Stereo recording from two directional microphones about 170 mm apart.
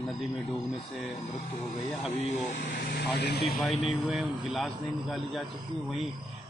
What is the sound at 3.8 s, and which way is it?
Speech, centre (ahead or behind).